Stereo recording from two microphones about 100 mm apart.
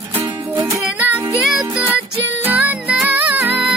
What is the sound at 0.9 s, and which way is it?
Music, 20° right (ahead or behind).